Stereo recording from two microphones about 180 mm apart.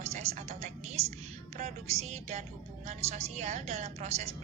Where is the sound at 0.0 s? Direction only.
35° right (ahead or behind).